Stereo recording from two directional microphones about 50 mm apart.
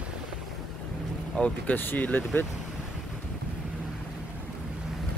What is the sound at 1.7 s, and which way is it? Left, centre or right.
Speech, left.